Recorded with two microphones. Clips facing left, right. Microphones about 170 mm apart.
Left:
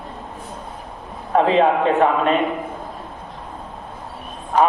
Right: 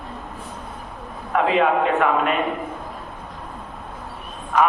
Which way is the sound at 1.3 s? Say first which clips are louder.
Left 3 dB; 30° left (ahead or behind).